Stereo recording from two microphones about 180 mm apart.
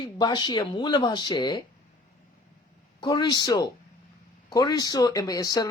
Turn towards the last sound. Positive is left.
turn(degrees=20)  # may be behind; listen again after turning